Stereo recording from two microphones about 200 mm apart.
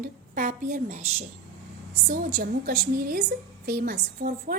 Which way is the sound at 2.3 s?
45° right (ahead or behind).